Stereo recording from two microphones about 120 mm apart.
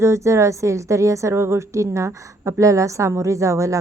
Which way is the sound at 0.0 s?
25° right (ahead or behind).